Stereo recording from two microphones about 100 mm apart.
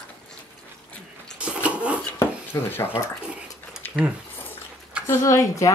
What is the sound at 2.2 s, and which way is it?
Speech, 25° left (ahead or behind).